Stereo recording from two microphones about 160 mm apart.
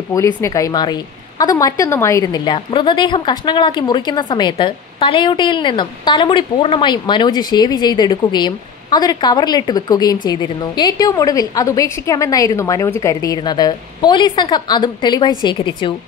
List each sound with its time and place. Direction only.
0.1 s a woman's voice: 20° left (ahead or behind)